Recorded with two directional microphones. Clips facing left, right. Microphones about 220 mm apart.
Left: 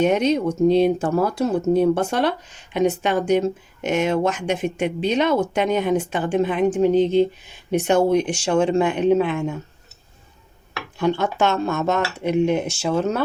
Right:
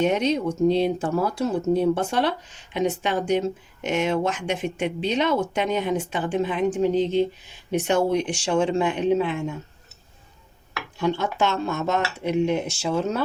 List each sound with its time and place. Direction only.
0.0 s speech: 50° left (ahead or behind)
11.0 s speech: 55° left (ahead or behind)